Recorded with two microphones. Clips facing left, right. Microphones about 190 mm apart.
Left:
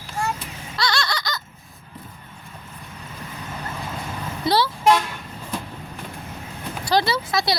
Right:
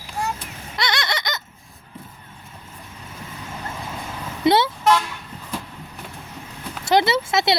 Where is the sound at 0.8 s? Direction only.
20° right (ahead or behind).